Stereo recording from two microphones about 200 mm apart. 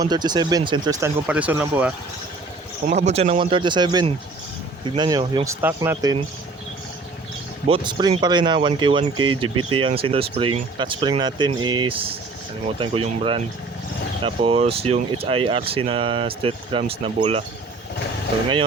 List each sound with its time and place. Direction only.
0.0 s speech: 20° right (ahead or behind)
2.9 s speech: 35° right (ahead or behind); by 6.2 s 20° right (ahead or behind)
7.7 s speech: 25° right (ahead or behind)
9.6 s speech: 90° right
9.8 s speech: 30° right (ahead or behind)